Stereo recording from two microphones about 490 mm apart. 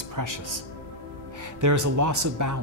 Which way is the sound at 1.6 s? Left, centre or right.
Right.